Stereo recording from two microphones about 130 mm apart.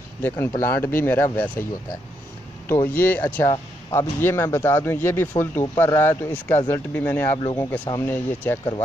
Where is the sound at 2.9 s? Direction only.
15° left (ahead or behind).